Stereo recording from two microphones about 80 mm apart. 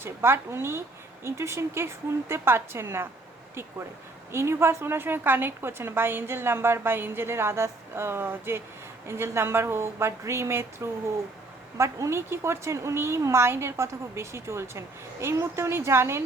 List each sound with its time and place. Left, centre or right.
0.0 s a woman's voice: right